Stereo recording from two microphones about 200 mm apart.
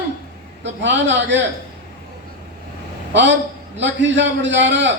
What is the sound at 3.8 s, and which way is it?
A man's voice, 65° right (ahead or behind).